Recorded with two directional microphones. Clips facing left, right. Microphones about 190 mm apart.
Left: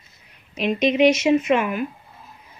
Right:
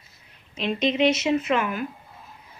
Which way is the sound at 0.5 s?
15° left (ahead or behind).